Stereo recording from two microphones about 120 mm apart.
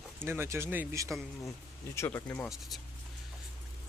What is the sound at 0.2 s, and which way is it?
Speech, 20° right (ahead or behind).